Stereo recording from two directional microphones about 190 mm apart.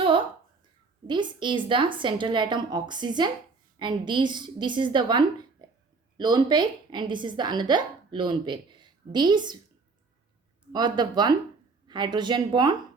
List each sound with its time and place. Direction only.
1.0 s a woman's voice: 25° right (ahead or behind)
10.7 s a woman's voice: 20° right (ahead or behind)